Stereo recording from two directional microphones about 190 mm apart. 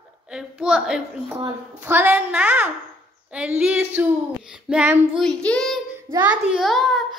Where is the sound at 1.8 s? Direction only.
10° right (ahead or behind).